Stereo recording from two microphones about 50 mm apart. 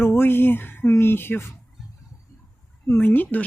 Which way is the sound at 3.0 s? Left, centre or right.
Left.